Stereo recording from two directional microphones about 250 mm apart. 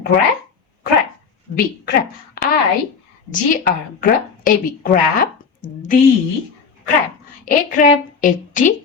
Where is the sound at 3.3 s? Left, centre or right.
Left.